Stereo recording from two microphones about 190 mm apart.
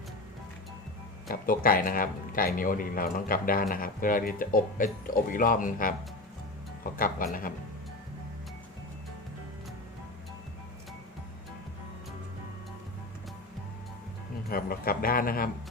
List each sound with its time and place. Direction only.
1.3 s speech: 50° left (ahead or behind)
6.9 s speech: 50° left (ahead or behind)
14.5 s speech: 50° left (ahead or behind)